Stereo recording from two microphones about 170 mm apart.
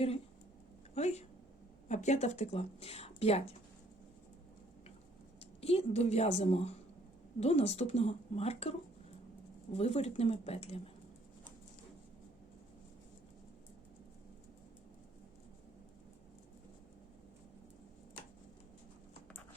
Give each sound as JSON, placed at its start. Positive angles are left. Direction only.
{"t": 0.9, "sound": "speech", "side_deg": 40}
{"t": 5.4, "sound": "speech", "side_deg": 35}
{"t": 9.7, "sound": "speech", "side_deg": 35}